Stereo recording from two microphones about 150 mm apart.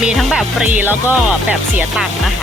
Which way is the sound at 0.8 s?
10° right (ahead or behind).